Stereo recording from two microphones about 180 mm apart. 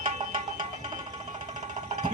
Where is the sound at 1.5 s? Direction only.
40° right (ahead or behind).